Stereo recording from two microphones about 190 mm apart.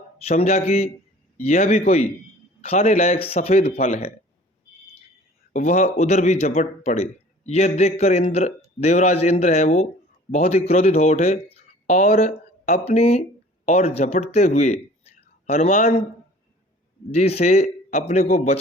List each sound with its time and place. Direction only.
0.3 s speech: 35° left (ahead or behind)
5.5 s speech: 40° left (ahead or behind)
17.1 s speech: 35° left (ahead or behind)